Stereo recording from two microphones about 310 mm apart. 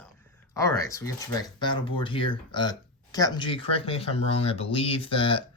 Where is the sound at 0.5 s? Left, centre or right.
Centre.